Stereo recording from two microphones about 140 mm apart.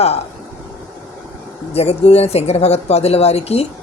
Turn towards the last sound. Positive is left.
turn(degrees=50)  # may be behind; listen again after turning